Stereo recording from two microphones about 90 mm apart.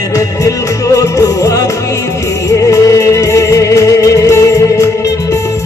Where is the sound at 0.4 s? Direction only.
35° left (ahead or behind).